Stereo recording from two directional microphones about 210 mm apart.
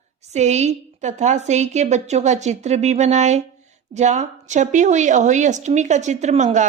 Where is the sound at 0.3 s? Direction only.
35° right (ahead or behind).